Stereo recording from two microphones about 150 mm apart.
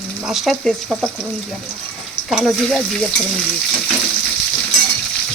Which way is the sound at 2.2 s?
Centre (ahead or behind).